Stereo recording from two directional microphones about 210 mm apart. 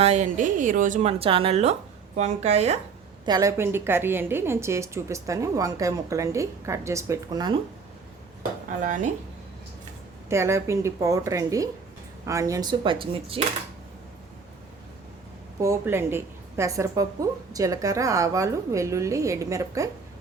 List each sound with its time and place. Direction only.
0.0 s speech: 35° right (ahead or behind)
3.2 s a woman's voice: 15° right (ahead or behind)
8.8 s speech: 40° right (ahead or behind)
10.2 s a woman's voice: 15° right (ahead or behind)
15.6 s a woman's voice: 10° right (ahead or behind)